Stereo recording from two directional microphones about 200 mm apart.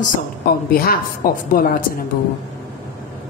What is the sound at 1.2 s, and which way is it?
Speech, 45° left (ahead or behind).